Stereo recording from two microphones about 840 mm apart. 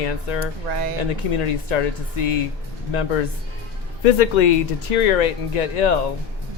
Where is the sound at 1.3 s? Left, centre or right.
Left.